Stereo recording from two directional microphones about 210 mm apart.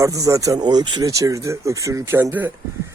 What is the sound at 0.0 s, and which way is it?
Speech, 15° right (ahead or behind).